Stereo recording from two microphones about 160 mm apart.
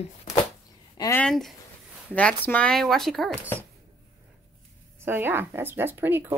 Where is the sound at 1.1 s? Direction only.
5° left (ahead or behind).